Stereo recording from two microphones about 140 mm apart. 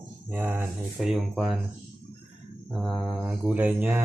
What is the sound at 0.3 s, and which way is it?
Speech, 10° right (ahead or behind).